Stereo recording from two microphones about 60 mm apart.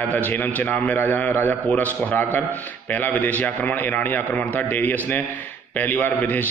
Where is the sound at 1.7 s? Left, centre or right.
Left.